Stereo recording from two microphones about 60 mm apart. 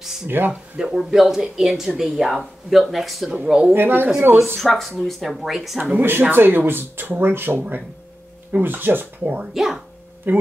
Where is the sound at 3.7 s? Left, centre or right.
Right.